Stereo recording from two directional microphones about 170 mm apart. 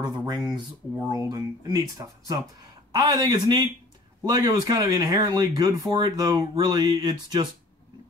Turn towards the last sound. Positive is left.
turn(degrees=-25)  # may be behind; listen again after turning